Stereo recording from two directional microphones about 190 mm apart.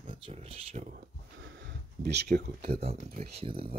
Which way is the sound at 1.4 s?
65° right (ahead or behind).